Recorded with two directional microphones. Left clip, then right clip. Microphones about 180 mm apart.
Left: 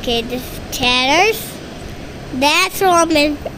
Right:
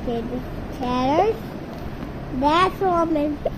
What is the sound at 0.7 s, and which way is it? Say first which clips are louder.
Speech: left 8 dB; 10° left (ahead or behind).